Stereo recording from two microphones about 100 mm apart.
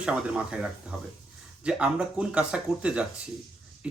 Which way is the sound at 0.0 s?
10° right (ahead or behind).